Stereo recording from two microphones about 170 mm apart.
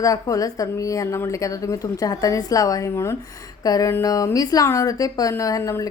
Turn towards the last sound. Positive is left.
turn(degrees=20)  # may be behind; listen again after turning